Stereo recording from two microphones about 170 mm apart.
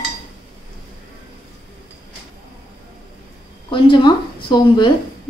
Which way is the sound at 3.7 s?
30° left (ahead or behind).